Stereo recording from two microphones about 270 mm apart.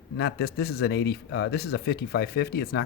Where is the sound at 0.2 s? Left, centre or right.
Left.